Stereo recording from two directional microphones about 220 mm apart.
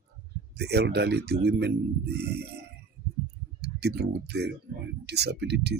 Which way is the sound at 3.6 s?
50° right (ahead or behind).